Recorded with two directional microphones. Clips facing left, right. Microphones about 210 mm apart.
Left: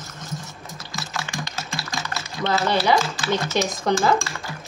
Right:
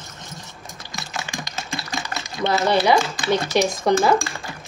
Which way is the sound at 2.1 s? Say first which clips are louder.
Right 2 dB; 15° right (ahead or behind).